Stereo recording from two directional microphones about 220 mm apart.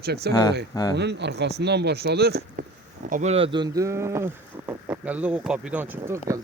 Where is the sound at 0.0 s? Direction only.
45° right (ahead or behind).